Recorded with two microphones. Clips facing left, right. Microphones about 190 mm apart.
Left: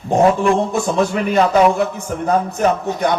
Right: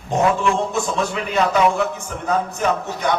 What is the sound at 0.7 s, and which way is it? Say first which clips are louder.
A man's voice: left 5 dB; 55° left (ahead or behind).